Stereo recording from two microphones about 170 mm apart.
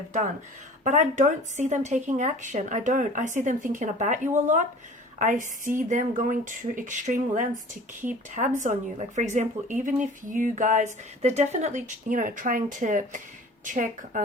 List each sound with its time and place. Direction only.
0.9 s speech: 45° right (ahead or behind)